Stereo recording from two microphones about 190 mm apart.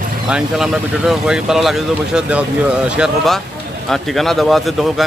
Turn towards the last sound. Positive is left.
turn(degrees=0)  # may be behind; listen again after turning